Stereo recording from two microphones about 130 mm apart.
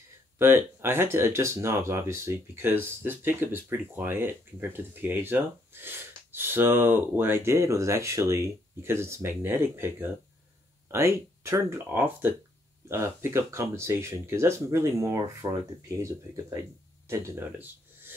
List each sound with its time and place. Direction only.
0.4 s speech: 20° right (ahead or behind)
17.1 s speech: 15° right (ahead or behind)